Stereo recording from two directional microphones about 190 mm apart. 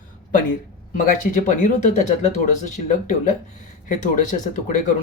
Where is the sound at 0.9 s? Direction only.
45° left (ahead or behind).